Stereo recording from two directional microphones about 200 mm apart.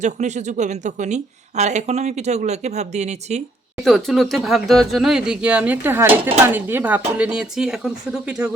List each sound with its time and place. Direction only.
0.0 s speech: 35° right (ahead or behind)
3.8 s speech: centre (ahead or behind)